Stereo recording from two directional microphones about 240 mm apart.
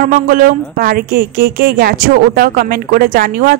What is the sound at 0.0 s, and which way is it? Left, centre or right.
Speech, right.